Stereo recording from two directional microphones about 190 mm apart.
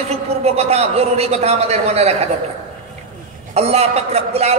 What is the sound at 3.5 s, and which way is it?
A man's voice, 35° right (ahead or behind).